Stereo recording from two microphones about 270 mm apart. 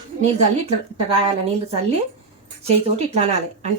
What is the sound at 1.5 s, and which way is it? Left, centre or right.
Speech, right.